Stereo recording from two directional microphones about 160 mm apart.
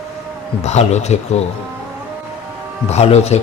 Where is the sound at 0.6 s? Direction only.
45° left (ahead or behind).